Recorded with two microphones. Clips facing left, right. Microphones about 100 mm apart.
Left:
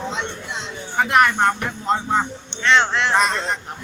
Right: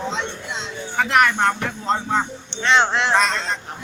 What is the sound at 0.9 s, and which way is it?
Speech, 15° left (ahead or behind).